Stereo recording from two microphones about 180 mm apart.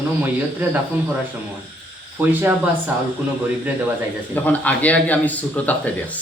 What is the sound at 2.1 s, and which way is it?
Speech, 10° right (ahead or behind).